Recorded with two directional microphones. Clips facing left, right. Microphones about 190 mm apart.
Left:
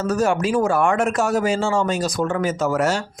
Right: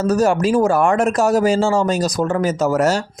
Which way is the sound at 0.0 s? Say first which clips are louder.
Right 4 dB; 40° right (ahead or behind).